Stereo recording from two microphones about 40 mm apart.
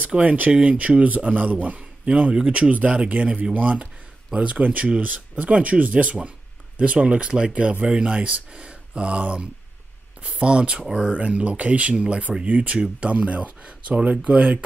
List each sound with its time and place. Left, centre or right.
0.2 s speech: right
10.9 s speech: centre
11.1 s speech: right